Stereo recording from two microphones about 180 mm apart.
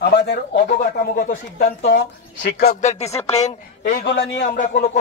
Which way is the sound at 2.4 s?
60° left (ahead or behind).